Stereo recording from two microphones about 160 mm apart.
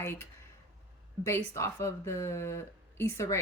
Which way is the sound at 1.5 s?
15° left (ahead or behind).